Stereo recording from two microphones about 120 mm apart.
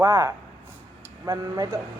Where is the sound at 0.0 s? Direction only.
25° right (ahead or behind).